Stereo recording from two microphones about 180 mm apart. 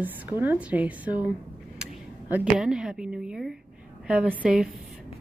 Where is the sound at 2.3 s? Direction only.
5° right (ahead or behind).